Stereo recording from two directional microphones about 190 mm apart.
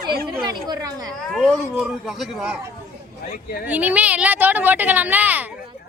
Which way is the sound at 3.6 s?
10° right (ahead or behind).